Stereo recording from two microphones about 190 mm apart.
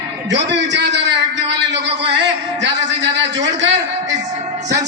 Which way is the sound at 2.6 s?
65° right (ahead or behind).